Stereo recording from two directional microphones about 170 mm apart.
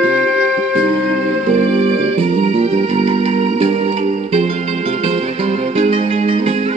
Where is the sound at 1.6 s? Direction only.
35° right (ahead or behind).